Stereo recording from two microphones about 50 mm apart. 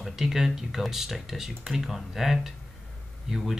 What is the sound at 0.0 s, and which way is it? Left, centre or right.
Speech, centre.